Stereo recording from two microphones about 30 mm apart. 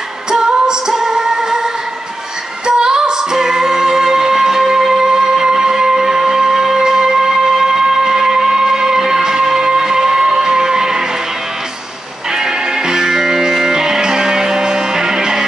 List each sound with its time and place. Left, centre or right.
0.3 s music: right
12.3 s music: centre